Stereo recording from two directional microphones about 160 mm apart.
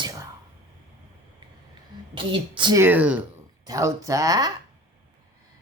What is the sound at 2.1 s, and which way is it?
Speech, 30° right (ahead or behind).